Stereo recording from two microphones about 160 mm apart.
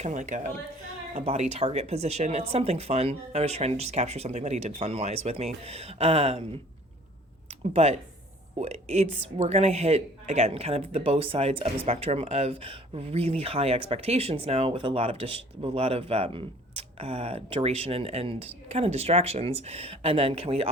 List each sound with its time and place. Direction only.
0.0 s a woman's voice: 50° right (ahead or behind)
1.1 s speech: 40° right (ahead or behind)
7.4 s a sound: 40° right (ahead or behind)
8.5 s speech: 40° right (ahead or behind)